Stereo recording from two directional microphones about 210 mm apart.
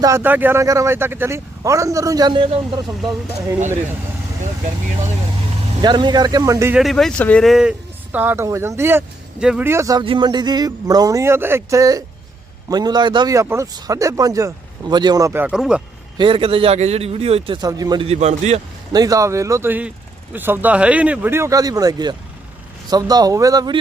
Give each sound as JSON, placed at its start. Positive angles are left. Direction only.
{"t": 0.0, "sound": "speech", "side_deg": -10}
{"t": 3.0, "sound": "speech", "side_deg": 0}
{"t": 5.8, "sound": "a man's voice", "side_deg": -20}
{"t": 6.7, "sound": "speech", "side_deg": 0}
{"t": 16.1, "sound": "a man's voice", "side_deg": -25}
{"t": 18.9, "sound": "speech", "side_deg": -15}